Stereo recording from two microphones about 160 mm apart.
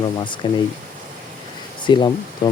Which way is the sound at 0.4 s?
30° left (ahead or behind).